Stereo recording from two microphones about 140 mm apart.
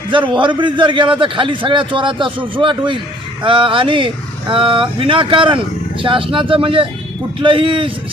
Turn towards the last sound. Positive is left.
turn(degrees=-40)  # may be behind; listen again after turning